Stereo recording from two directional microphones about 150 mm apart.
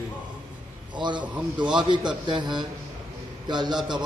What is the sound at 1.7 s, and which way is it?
A man's voice, 30° right (ahead or behind).